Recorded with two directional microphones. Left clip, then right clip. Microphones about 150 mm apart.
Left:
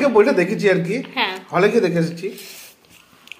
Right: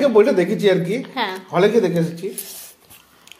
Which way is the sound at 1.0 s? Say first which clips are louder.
Left 2 dB; 50° right (ahead or behind).